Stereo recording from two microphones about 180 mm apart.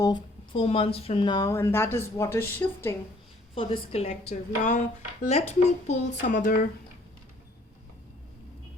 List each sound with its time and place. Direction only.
0.0 s speech: 25° left (ahead or behind)
3.5 s speech: 30° left (ahead or behind); by 6.7 s 50° left (ahead or behind)